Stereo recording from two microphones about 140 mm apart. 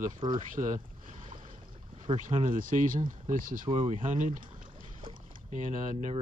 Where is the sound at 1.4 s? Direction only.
65° right (ahead or behind).